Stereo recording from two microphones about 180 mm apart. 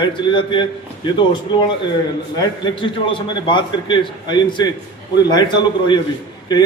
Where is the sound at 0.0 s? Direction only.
25° left (ahead or behind).